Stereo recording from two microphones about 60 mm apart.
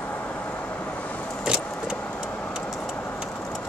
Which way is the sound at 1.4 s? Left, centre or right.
Centre.